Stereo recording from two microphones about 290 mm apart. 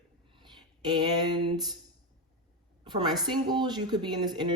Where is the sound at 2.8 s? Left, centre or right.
Centre.